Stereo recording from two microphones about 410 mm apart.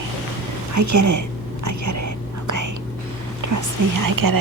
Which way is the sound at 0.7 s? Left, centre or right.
Right.